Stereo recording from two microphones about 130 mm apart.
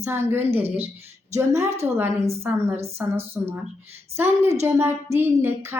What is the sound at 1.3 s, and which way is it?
A woman's voice, 20° right (ahead or behind).